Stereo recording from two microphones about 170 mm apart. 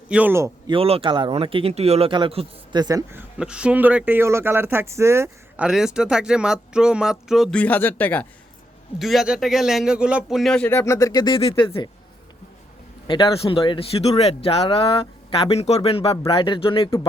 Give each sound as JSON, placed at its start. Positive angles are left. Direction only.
{"t": 0.1, "sound": "speech", "side_deg": -10}
{"t": 0.7, "sound": "speech", "side_deg": -35}
{"t": 5.6, "sound": "speech", "side_deg": -5}
{"t": 7.6, "sound": "speech", "side_deg": 10}
{"t": 9.0, "sound": "speech", "side_deg": 0}
{"t": 10.7, "sound": "speech", "side_deg": 15}
{"t": 13.1, "sound": "speech", "side_deg": 25}